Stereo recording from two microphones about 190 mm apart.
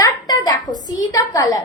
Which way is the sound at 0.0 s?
20° left (ahead or behind).